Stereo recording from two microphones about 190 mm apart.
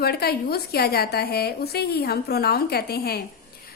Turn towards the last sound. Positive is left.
turn(degrees=55)  # may be behind; listen again after turning